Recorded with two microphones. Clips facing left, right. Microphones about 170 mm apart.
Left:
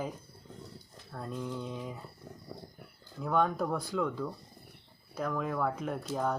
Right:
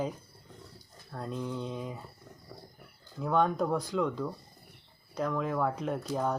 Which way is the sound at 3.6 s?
15° right (ahead or behind).